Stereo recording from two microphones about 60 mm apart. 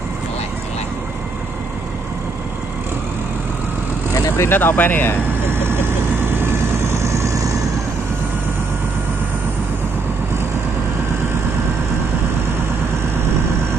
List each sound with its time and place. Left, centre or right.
4.4 s speech: left
5.5 s vehicle: right